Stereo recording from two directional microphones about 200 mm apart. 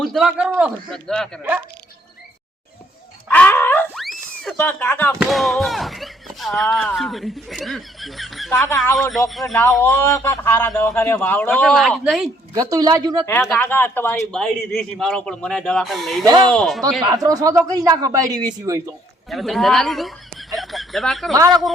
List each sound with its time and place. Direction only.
0.0 s speech: centre (ahead or behind)
0.9 s speech: 5° left (ahead or behind)
1.4 s speech: 5° right (ahead or behind)
3.2 s dog: 5° left (ahead or behind)
4.4 s a man's voice: 10° left (ahead or behind)
12.5 s speech: 20° right (ahead or behind)
13.4 s a man's voice: 5° left (ahead or behind)
17.0 s speech: 20° right (ahead or behind)
19.3 s speech: centre (ahead or behind)